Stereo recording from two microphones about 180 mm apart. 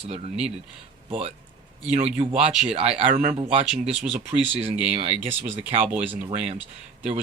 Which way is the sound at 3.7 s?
5° right (ahead or behind).